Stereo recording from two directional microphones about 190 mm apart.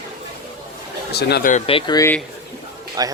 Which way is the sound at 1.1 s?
60° left (ahead or behind).